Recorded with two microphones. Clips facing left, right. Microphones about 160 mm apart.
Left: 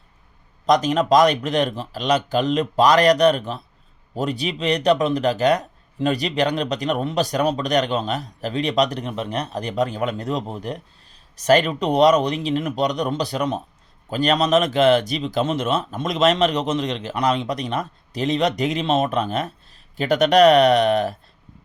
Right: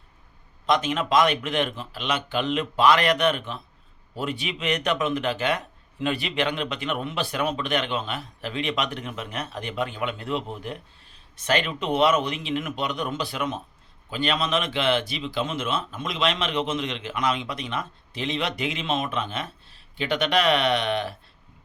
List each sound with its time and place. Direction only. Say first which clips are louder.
0.6 s speech: left 6 dB; 40° left (ahead or behind)